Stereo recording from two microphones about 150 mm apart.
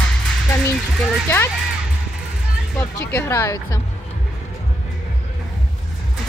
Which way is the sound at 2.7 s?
15° left (ahead or behind).